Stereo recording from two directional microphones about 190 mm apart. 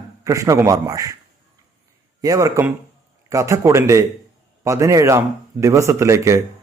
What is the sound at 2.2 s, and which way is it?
Speech, 15° right (ahead or behind).